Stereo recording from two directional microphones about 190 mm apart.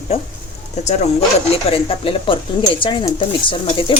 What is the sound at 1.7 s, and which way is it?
Speech, 30° left (ahead or behind).